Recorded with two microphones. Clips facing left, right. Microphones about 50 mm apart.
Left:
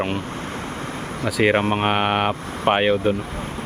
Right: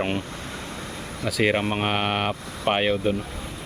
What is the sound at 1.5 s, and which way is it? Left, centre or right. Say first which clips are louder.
Speech: left 5 dB; left.